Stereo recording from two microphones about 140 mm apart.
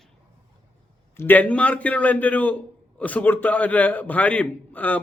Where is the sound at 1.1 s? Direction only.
15° left (ahead or behind).